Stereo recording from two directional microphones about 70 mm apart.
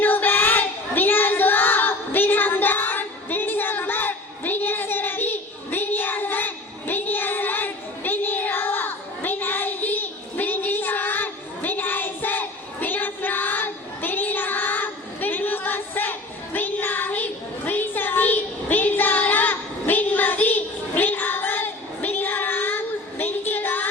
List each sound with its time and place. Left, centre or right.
0.0 s child singing: left